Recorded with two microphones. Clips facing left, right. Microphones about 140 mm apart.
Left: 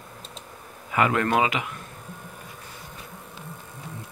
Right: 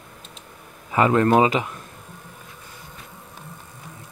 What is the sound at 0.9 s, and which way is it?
Speech, 30° right (ahead or behind).